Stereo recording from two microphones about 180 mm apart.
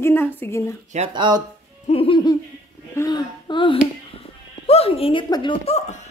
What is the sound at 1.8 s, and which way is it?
Laughter, 30° left (ahead or behind).